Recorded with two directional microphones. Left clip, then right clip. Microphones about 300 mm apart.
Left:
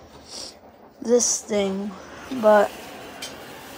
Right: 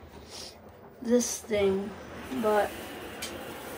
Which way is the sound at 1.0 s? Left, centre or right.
Left.